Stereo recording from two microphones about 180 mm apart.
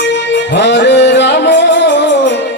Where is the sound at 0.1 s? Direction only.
75° left (ahead or behind).